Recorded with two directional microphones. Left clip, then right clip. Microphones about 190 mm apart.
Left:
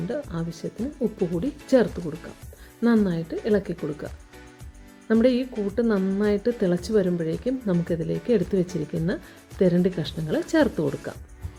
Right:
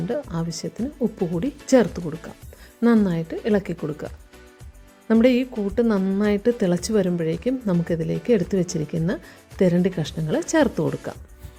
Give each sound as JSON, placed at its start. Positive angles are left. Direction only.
{"t": 0.1, "sound": "speech", "side_deg": -25}